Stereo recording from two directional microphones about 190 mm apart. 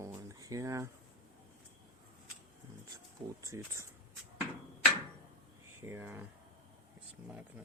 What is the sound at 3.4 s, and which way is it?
Speech, 15° right (ahead or behind).